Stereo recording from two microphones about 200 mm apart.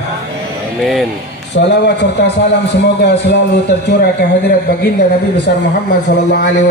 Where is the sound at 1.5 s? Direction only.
60° left (ahead or behind).